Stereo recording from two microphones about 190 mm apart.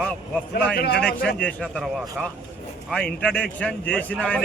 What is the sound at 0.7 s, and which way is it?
Speech, 60° left (ahead or behind).